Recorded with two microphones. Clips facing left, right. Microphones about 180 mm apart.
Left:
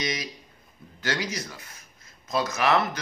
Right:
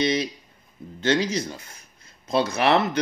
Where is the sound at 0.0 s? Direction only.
30° right (ahead or behind).